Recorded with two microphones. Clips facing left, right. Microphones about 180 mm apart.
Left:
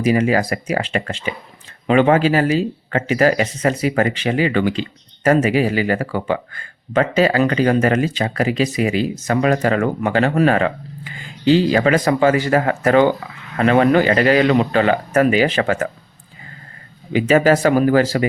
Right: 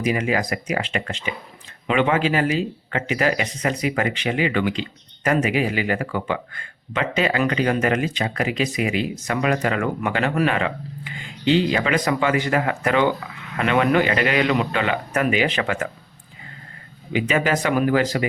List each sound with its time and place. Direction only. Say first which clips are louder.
0.1 s speech: left 7 dB; 40° left (ahead or behind)
17.1 s speech: left 7 dB; 40° left (ahead or behind)